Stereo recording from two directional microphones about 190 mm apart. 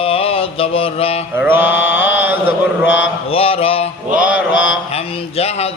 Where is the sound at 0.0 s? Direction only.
30° left (ahead or behind).